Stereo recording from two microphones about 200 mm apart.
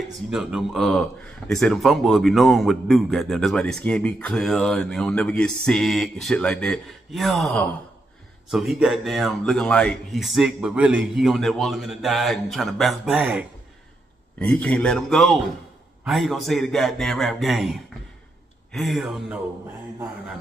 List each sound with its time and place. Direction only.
0.3 s speech: centre (ahead or behind)
14.4 s speech: 5° left (ahead or behind)